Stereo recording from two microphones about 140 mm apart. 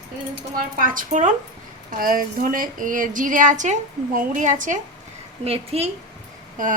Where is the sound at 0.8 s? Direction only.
75° right (ahead or behind).